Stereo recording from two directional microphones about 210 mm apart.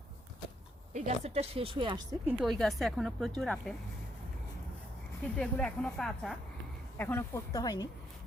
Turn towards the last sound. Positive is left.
turn(degrees=20)  # may be behind; listen again after turning